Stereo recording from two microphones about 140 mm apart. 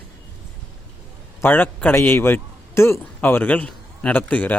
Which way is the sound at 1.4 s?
15° left (ahead or behind).